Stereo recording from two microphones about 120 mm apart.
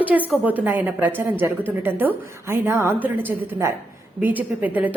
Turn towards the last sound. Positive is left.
turn(degrees=-15)  # may be behind; listen again after turning